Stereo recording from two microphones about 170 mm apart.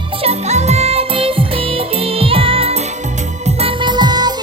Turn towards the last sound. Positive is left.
turn(degrees=-25)  # may be behind; listen again after turning